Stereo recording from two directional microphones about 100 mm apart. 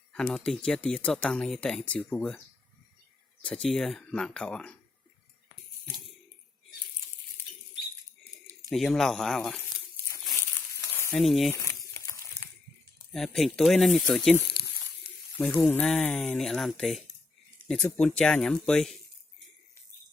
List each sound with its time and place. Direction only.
0.3 s speech: centre (ahead or behind)
3.4 s speech: 5° left (ahead or behind)
5.8 s a sound: centre (ahead or behind)
8.7 s speech: centre (ahead or behind)
10.3 s a sound: 25° left (ahead or behind)
11.1 s speech: centre (ahead or behind)
11.5 s crumpling: 35° left (ahead or behind)
13.1 s speech: 5° left (ahead or behind)
15.6 s speech: 15° left (ahead or behind)
16.4 s speech: 5° left (ahead or behind)